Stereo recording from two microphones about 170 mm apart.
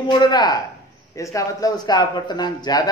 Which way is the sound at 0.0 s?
25° left (ahead or behind).